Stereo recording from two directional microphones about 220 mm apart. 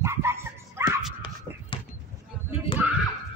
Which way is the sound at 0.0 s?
10° right (ahead or behind).